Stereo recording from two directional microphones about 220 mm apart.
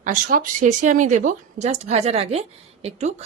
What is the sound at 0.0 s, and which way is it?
A woman's voice, 35° right (ahead or behind).